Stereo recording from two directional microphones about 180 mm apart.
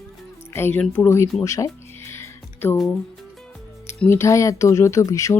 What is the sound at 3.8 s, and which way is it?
Mantra, 15° left (ahead or behind).